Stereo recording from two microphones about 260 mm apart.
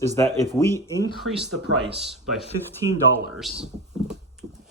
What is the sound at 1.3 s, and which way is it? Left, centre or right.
Speech, right.